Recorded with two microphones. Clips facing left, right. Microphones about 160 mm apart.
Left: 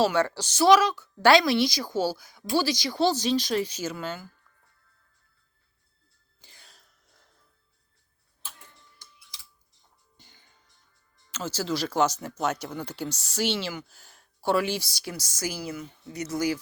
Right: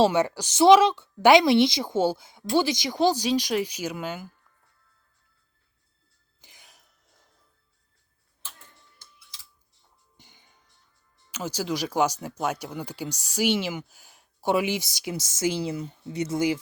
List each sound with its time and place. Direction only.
0.0 s a woman's voice: 20° right (ahead or behind)
6.4 s a sound: 15° right (ahead or behind)
10.2 s music: 20° right (ahead or behind)
11.3 s speech: 15° right (ahead or behind)